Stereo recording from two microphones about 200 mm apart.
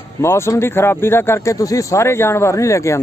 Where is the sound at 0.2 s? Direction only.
15° left (ahead or behind).